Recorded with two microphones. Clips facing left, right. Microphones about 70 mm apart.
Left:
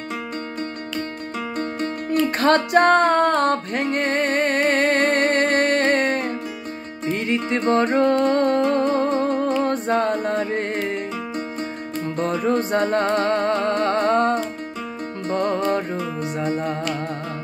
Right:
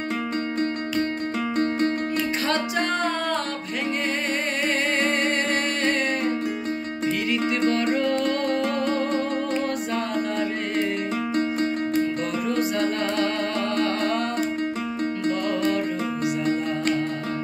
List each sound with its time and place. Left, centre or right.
2.4 s music: left
7.1 s music: left
12.2 s music: left
15.3 s music: left